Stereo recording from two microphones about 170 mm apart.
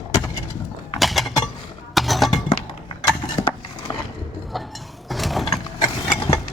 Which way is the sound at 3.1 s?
25° left (ahead or behind).